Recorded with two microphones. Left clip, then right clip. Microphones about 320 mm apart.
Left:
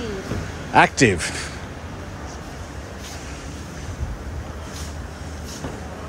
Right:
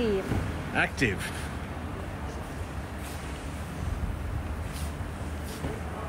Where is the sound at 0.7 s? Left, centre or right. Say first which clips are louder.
Left 12 dB; centre.